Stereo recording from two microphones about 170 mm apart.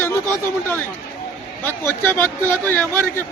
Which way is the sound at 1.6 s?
10° left (ahead or behind).